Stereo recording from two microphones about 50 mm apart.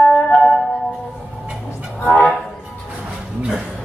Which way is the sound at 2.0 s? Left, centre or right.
Centre.